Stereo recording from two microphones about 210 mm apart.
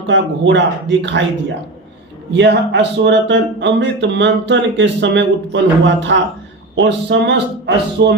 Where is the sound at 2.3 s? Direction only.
55° right (ahead or behind).